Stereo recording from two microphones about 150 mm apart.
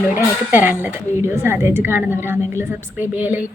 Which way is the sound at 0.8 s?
15° right (ahead or behind).